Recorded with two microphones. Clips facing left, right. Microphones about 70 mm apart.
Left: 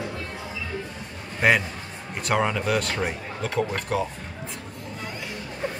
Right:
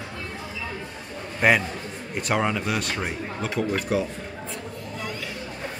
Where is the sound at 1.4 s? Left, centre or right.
Centre.